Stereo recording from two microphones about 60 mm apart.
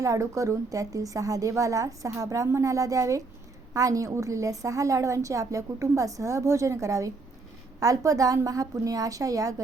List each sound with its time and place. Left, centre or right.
0.0 s a woman's voice: right
4.1 s a woman's voice: right
7.8 s a woman's voice: right